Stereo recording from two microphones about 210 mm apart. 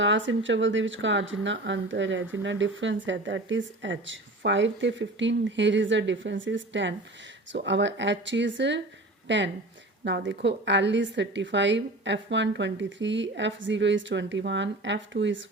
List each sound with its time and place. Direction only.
0.0 s speech: 60° right (ahead or behind)